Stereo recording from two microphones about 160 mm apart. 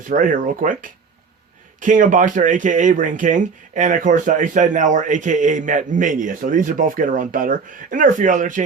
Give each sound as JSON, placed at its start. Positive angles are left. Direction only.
{"t": 0.1, "sound": "speech", "side_deg": -55}